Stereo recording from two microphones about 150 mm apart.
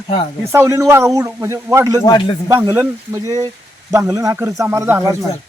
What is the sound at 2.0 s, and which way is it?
Speech, 30° left (ahead or behind).